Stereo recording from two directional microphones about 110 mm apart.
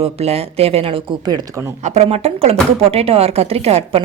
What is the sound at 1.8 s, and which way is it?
A woman's voice, 80° right.